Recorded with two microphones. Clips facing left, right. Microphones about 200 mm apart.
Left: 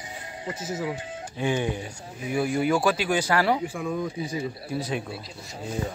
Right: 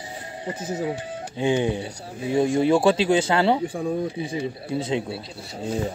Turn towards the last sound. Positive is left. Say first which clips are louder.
# right 5 dB
turn(degrees=-30)  # may be behind; listen again after turning